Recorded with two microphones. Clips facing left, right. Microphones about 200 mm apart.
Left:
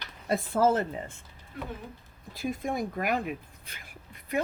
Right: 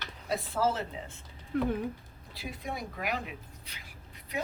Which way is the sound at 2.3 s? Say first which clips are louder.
Left 8 dB; 50° left (ahead or behind).